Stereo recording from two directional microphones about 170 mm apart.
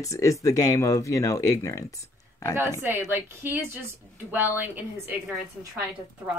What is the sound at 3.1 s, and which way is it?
A woman's voice, 15° right (ahead or behind).